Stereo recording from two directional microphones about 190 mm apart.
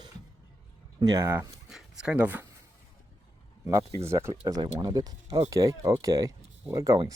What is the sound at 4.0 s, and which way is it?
Speech, 15° right (ahead or behind).